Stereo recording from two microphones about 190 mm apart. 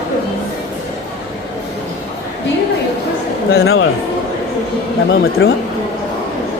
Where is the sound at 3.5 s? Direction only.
90° left.